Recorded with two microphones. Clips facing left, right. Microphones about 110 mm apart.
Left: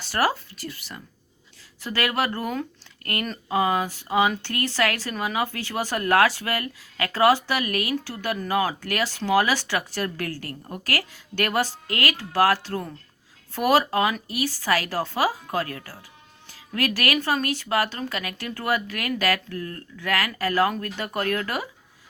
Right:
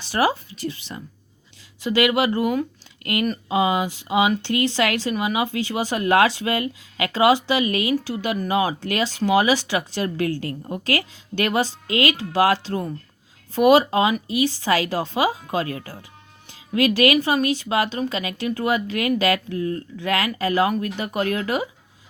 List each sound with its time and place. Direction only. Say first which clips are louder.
0.0 s speech: right 3 dB; 15° right (ahead or behind)